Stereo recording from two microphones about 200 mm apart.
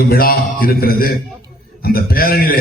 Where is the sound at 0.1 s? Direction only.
45° left (ahead or behind).